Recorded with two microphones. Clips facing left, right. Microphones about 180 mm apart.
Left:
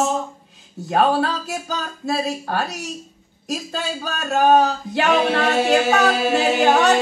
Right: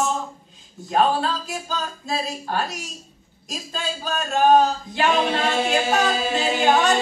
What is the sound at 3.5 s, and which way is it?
A capella, 65° left (ahead or behind).